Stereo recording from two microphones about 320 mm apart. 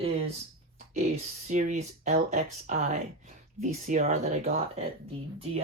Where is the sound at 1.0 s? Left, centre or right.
Right.